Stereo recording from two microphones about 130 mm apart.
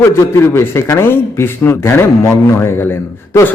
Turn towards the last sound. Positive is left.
turn(degrees=15)  # may be behind; listen again after turning